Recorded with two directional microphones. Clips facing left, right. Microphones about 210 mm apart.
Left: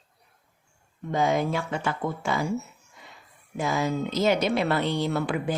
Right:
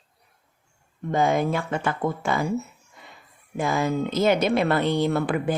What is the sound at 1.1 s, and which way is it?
A woman's voice, 50° right (ahead or behind).